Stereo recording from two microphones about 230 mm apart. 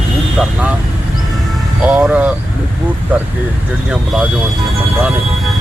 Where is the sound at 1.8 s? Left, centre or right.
Centre.